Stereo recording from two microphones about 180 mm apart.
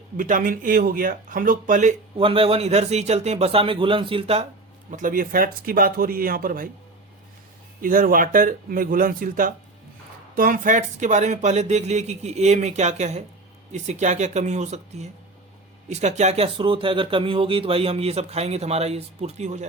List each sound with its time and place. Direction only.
0.2 s speech: 50° right (ahead or behind)
2.1 s speech: 30° right (ahead or behind)
4.9 s speech: 45° right (ahead or behind)
7.8 s speech: 50° right (ahead or behind)